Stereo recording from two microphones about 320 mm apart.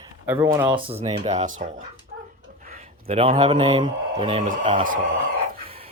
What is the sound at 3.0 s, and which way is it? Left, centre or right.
Speech, centre.